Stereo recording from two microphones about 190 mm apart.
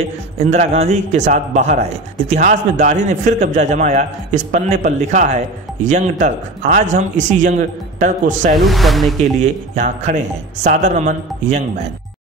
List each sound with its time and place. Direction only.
0.5 s a man's voice: 35° right (ahead or behind)
8.6 s speech: centre (ahead or behind)
9.4 s a man's voice: 40° right (ahead or behind)